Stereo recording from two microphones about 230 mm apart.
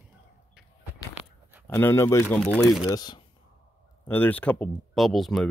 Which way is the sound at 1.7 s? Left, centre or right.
Centre.